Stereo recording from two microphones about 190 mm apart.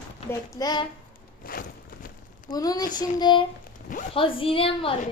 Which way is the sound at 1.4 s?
50° left (ahead or behind).